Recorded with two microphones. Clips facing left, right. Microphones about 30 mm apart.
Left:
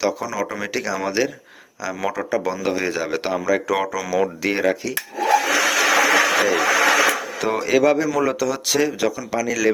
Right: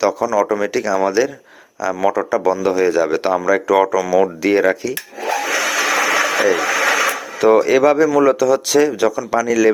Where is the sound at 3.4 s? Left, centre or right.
Centre.